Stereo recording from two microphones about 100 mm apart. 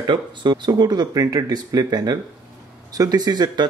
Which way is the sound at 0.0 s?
50° right (ahead or behind).